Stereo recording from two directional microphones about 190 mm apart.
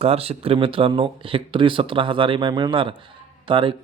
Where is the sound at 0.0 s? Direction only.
30° right (ahead or behind).